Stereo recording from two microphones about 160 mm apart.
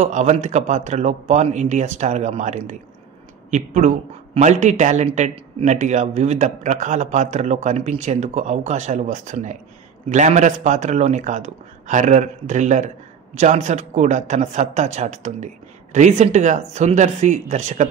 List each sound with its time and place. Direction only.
0.0 s a man's voice: 45° right (ahead or behind)